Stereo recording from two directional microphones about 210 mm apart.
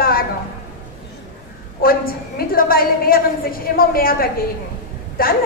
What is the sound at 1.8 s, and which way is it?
A woman's voice, 45° left (ahead or behind).